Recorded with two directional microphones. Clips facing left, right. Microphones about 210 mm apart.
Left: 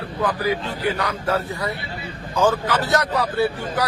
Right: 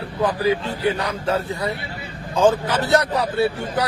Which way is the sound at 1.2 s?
25° right (ahead or behind).